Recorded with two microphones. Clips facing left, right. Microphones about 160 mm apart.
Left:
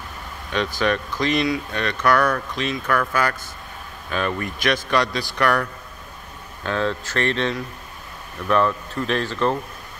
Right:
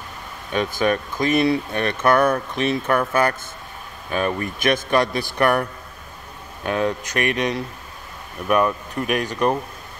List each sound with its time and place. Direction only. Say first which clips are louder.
0.5 s speech: right 2 dB; 20° right (ahead or behind)